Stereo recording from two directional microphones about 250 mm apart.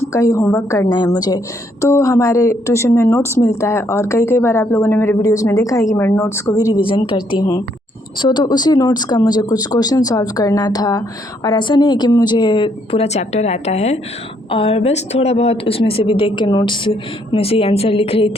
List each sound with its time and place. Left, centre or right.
0.0 s a woman's voice: centre